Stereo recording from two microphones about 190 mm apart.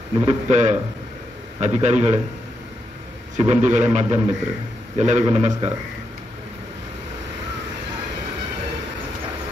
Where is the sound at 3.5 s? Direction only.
40° right (ahead or behind).